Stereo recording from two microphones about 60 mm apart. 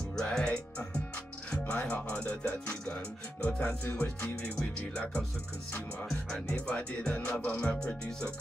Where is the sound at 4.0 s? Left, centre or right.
Left.